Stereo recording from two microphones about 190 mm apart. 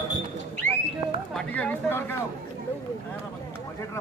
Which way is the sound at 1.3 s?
5° left (ahead or behind).